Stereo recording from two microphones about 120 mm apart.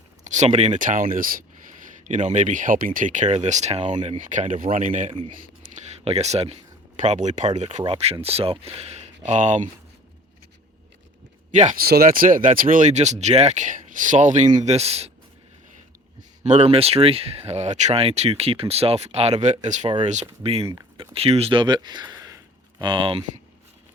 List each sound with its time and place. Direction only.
0.3 s speech: 70° right (ahead or behind); by 1.0 s 90° right
2.0 s speech: 90° right
4.3 s speech: 90° right
5.9 s speech: 65° right (ahead or behind)
7.9 s speech: 60° right (ahead or behind); by 9.6 s 90° right
11.5 s speech: 80° right; by 15.1 s 60° right (ahead or behind)
16.4 s speech: 65° right (ahead or behind)
20.4 s speech: 55° right (ahead or behind); by 22.4 s 30° right (ahead or behind)
22.8 s speech: 45° right (ahead or behind)